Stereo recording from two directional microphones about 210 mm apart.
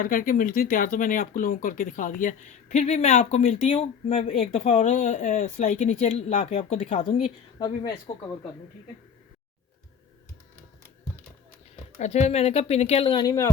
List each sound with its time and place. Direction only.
0.0 s speech: 40° left (ahead or behind)
7.6 s speech: 20° left (ahead or behind)
11.9 s speech: 30° left (ahead or behind); by 13.5 s 15° left (ahead or behind)